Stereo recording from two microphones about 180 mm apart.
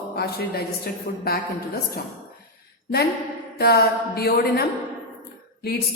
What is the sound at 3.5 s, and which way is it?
A woman's voice, 60° left (ahead or behind).